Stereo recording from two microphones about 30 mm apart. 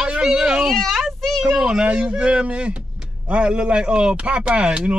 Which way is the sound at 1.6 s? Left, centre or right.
Right.